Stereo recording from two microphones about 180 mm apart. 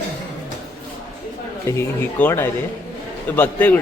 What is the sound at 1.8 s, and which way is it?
Speech, 15° left (ahead or behind).